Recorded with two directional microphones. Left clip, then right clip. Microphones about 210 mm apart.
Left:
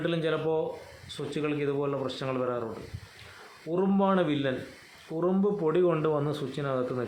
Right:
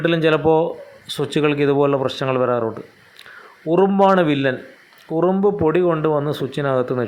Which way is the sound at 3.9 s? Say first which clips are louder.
Right 8 dB; 25° right (ahead or behind).